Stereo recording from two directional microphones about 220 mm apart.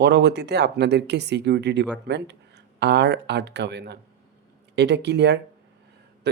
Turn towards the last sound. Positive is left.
turn(degrees=-50)  # may be behind; listen again after turning